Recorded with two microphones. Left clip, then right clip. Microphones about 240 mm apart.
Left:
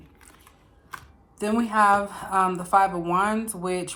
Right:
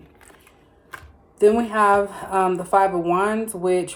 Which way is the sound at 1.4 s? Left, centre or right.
Centre.